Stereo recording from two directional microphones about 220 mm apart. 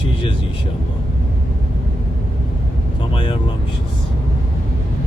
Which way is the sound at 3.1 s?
20° left (ahead or behind).